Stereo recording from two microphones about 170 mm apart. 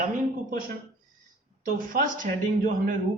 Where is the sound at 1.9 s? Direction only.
50° right (ahead or behind).